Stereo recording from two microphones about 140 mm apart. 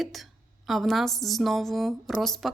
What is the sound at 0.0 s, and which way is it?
A woman's voice, centre (ahead or behind).